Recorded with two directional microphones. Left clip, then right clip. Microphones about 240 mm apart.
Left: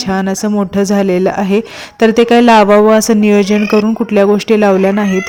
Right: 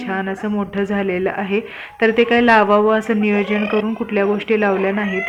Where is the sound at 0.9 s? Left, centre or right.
Left.